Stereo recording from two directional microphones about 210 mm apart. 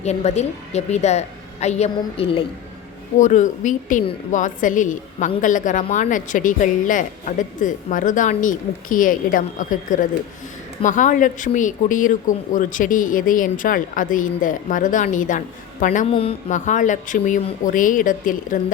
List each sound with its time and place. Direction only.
0.0 s a woman's voice: 30° left (ahead or behind)